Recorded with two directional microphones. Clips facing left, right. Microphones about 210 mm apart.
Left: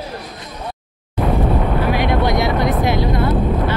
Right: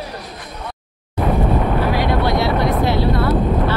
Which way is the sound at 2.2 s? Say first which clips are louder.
Even; 15° left (ahead or behind).